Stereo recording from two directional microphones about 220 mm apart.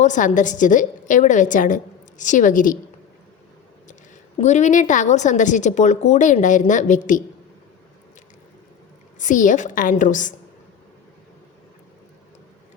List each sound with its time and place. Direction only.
0.0 s a woman's voice: 35° left (ahead or behind)
4.4 s a woman's voice: 30° left (ahead or behind)
9.1 s a woman's voice: 35° left (ahead or behind)